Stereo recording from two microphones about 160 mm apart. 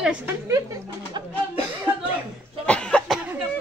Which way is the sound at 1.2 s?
30° right (ahead or behind).